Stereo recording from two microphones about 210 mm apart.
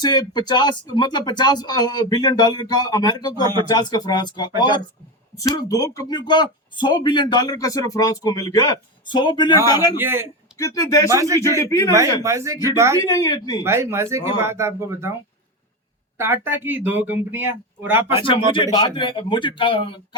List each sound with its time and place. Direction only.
0.0 s speech: 20° left (ahead or behind)
10.0 s speech: 10° right (ahead or behind)
10.6 s speech: 15° left (ahead or behind)
11.1 s speech: 15° right (ahead or behind)
11.6 s speech: 15° left (ahead or behind)
12.2 s speech: 15° right (ahead or behind)
13.0 s speech: 15° left (ahead or behind)
13.7 s speech: 10° right (ahead or behind)
16.1 s speech: 10° right (ahead or behind)
18.5 s speech: 20° left (ahead or behind)